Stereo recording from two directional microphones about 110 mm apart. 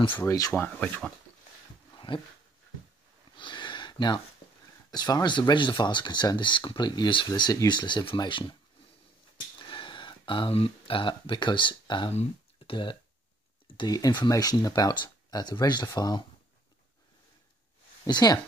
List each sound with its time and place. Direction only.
0.6 s speech: 15° left (ahead or behind)
2.0 s dog: 45° left (ahead or behind)
3.3 s a sound: 45° left (ahead or behind)
4.9 s speech: 40° left (ahead or behind)
9.6 s speech: 45° left (ahead or behind)
12.1 s a sound: 75° left (ahead or behind)
13.7 s speech: 35° left (ahead or behind)
18.0 s speech: 35° left (ahead or behind)